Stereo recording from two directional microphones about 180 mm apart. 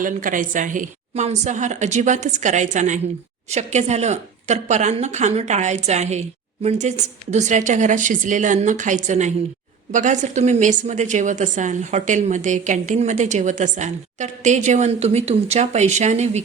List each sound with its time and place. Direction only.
0.0 s a woman's voice: 50° right (ahead or behind)